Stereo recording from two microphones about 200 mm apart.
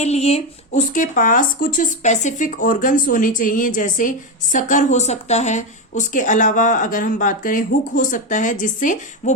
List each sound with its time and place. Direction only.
0.0 s speech: 30° left (ahead or behind)